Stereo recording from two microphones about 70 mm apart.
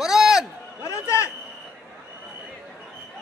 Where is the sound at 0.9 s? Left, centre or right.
Left.